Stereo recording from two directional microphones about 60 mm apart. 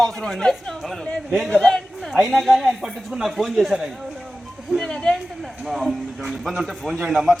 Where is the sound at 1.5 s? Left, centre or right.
Centre.